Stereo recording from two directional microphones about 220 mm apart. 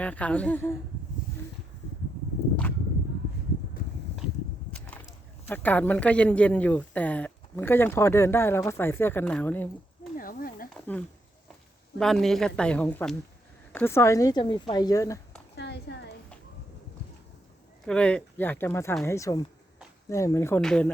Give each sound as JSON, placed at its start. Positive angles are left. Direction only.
{"t": 0.0, "sound": "speech", "side_deg": 5}
{"t": 4.7, "sound": "speech", "side_deg": 5}
{"t": 10.2, "sound": "a sound", "side_deg": 40}
{"t": 11.9, "sound": "speech", "side_deg": 0}
{"t": 15.5, "sound": "a sound", "side_deg": 50}
{"t": 17.8, "sound": "speech", "side_deg": 5}